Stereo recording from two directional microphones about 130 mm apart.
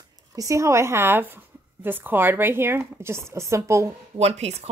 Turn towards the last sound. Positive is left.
turn(degrees=-55)  # may be behind; listen again after turning